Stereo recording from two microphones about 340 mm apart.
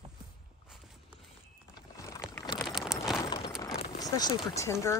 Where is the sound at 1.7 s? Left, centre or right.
Centre.